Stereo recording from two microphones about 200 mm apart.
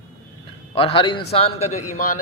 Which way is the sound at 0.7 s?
25° left (ahead or behind).